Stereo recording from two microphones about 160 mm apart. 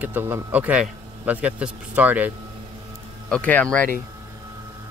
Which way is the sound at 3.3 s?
10° left (ahead or behind).